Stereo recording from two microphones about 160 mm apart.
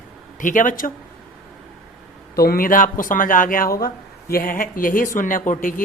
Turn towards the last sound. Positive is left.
turn(degrees=60)  # may be behind; listen again after turning